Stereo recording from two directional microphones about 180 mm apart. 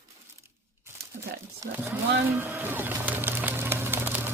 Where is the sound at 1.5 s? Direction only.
10° right (ahead or behind).